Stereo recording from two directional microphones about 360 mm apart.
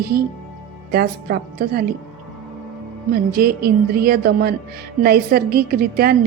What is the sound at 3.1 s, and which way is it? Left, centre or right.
Speech, right.